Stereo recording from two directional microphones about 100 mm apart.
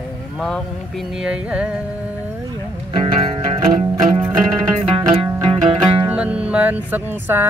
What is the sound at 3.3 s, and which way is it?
Music, 80° right.